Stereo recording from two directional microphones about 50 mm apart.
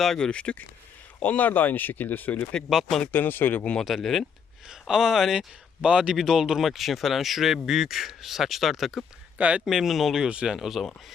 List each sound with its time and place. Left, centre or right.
0.0 s speech: centre
0.3 s speech: left
1.2 s speech: left
2.6 s speech: centre
3.1 s speech: left
3.8 s speech: centre
4.7 s speech: centre
5.8 s speech: right
6.1 s speech: centre
9.4 s speech: right
9.6 s speech: centre
10.2 s speech: centre